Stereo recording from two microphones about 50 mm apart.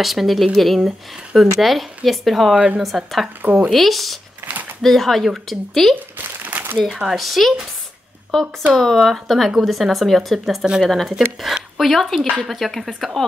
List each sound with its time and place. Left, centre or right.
0.0 s speech: centre
3.4 s speech: right
3.7 s speech: centre
6.4 s crumpling: right
6.8 s speech: centre
11.4 s speech: centre
11.8 s speech: centre